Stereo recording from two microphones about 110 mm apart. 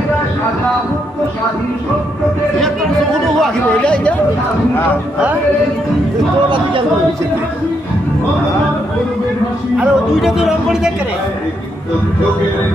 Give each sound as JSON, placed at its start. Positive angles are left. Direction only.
{"t": 3.3, "sound": "speech", "side_deg": 10}
{"t": 9.8, "sound": "speech", "side_deg": 0}